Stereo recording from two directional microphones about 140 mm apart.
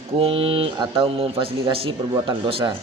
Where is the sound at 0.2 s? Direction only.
40° right (ahead or behind).